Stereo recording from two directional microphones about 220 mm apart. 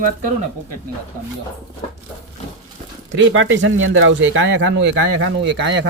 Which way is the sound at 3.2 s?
60° right (ahead or behind).